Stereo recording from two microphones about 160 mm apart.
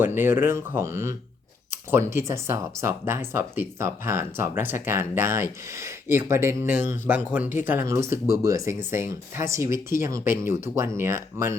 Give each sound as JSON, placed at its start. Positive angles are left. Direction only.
{"t": 0.0, "sound": "speech", "side_deg": -15}